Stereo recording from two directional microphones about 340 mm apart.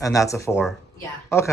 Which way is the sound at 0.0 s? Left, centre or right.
Centre.